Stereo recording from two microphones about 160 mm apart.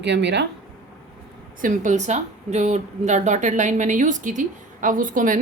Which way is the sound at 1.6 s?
50° right (ahead or behind).